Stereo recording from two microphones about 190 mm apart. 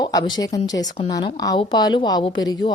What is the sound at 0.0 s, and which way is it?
A woman's voice, 20° left (ahead or behind).